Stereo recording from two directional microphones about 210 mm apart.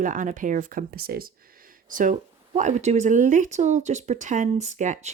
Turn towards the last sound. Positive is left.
turn(degrees=-35)  # may be behind; listen again after turning